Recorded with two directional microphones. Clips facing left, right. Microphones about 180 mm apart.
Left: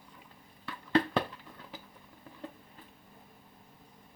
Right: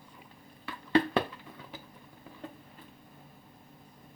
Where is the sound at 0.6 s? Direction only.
5° right (ahead or behind).